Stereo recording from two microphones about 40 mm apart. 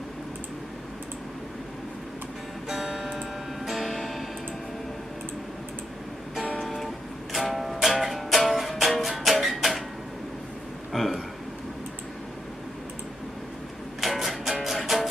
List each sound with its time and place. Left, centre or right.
2.6 s music: centre
3.7 s music: centre
6.6 s music: centre
10.9 s a sound: centre
14.0 s music: centre